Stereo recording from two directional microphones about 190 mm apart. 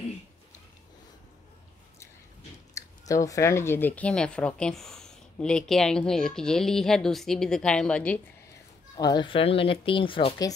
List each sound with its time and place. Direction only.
2.7 s speech: 15° left (ahead or behind)
8.9 s speech: 20° left (ahead or behind)